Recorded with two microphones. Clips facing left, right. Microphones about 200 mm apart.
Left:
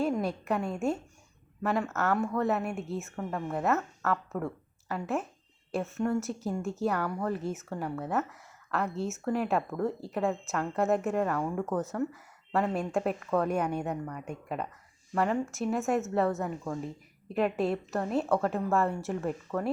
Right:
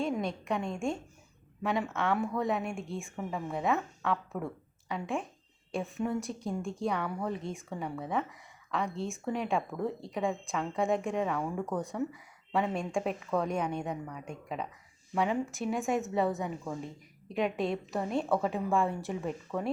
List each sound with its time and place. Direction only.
0.0 s a woman's voice: 5° left (ahead or behind)